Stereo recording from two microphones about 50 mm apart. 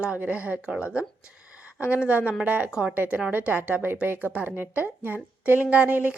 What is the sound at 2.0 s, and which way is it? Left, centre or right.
A woman's voice, right.